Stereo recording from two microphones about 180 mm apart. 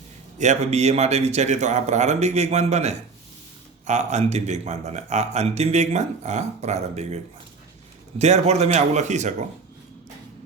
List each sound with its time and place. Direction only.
0.3 s speech: 40° right (ahead or behind)
8.2 s speech: 40° right (ahead or behind)